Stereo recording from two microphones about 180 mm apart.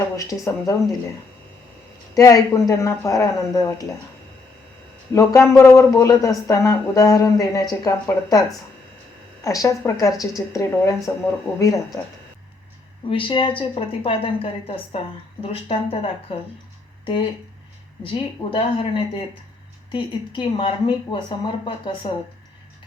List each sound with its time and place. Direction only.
0.2 s a woman's voice: 20° left (ahead or behind)
2.1 s a woman's voice: 20° left (ahead or behind)
5.1 s a woman's voice: 15° left (ahead or behind)
13.1 s a woman's voice: 30° left (ahead or behind)
18.0 s a woman's voice: 30° left (ahead or behind)